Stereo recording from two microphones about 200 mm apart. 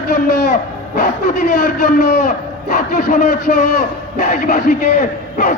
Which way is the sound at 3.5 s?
45° left (ahead or behind).